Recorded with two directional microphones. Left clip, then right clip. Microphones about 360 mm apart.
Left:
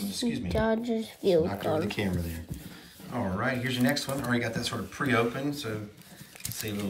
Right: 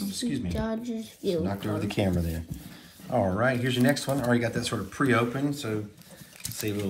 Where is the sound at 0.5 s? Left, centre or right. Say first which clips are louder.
Left 5 dB; left.